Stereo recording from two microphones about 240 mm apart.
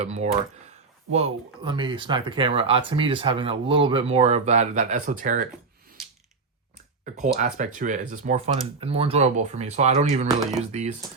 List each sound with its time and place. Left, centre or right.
0.0 s speech: right
7.0 s speech: right